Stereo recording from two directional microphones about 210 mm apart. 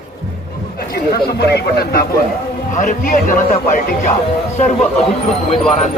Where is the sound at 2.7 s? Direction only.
40° left (ahead or behind).